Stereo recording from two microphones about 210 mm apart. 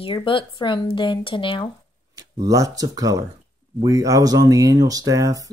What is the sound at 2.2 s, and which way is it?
Speech, 15° right (ahead or behind).